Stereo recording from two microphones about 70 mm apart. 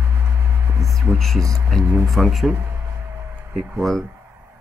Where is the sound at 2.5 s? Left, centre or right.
Right.